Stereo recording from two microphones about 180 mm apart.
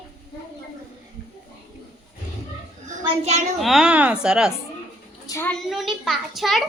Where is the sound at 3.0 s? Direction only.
35° right (ahead or behind).